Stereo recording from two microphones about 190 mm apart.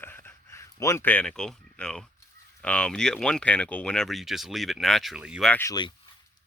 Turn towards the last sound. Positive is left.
turn(degrees=10)  # may be behind; listen again after turning